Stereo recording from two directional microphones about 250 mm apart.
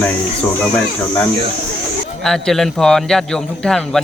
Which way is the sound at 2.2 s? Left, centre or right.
Centre.